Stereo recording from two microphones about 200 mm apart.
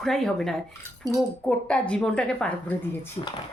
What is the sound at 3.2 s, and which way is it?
Speech, 30° left (ahead or behind).